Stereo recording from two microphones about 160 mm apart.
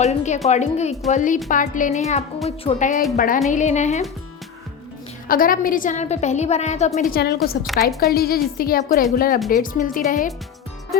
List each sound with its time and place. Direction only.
0.0 s a woman's voice: 45° left (ahead or behind); by 3.4 s 60° left (ahead or behind)
3.5 s a woman's voice: 50° left (ahead or behind)
5.3 s a woman's voice: 60° left (ahead or behind); by 7.0 s 45° left (ahead or behind)
7.1 s a woman's voice: 80° left
7.7 s a woman's voice: centre (ahead or behind)
8.1 s a woman's voice: 70° left (ahead or behind)